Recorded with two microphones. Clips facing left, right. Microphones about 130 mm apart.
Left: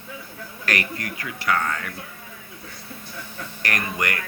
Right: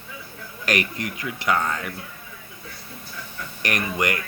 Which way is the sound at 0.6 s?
20° right (ahead or behind).